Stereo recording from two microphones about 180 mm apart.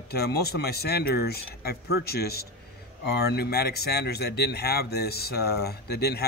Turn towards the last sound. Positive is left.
turn(degrees=65)  # may be behind; listen again after turning